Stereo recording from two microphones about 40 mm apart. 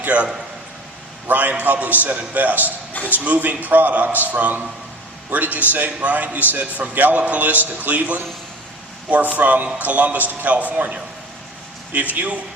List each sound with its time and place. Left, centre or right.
0.0 s a man's voice: right
1.3 s a man's voice: right